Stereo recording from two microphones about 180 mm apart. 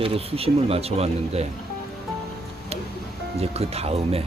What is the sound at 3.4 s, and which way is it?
Speech, 35° right (ahead or behind).